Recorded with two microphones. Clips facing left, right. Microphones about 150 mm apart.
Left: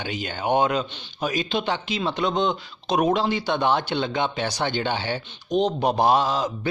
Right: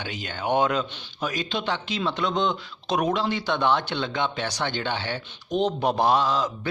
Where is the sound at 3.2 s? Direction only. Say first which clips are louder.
Left 1 dB; 5° left (ahead or behind).